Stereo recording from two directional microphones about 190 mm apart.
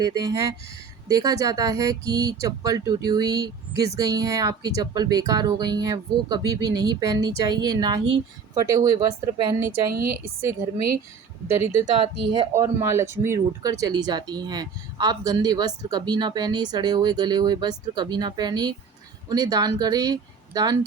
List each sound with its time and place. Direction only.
0.0 s a woman's voice: 20° right (ahead or behind)
10.2 s a woman's voice: 15° right (ahead or behind)
11.9 s speech: 30° right (ahead or behind)
12.5 s speech: 15° right (ahead or behind)